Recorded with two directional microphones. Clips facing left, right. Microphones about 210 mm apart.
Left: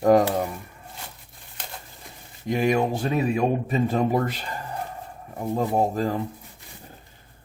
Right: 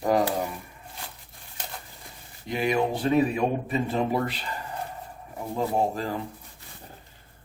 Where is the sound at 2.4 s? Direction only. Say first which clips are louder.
Left 3 dB; 45° left (ahead or behind).